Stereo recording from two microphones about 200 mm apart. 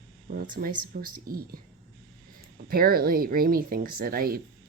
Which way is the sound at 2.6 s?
45° right (ahead or behind).